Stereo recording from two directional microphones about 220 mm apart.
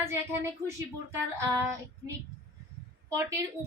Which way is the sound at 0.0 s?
10° right (ahead or behind).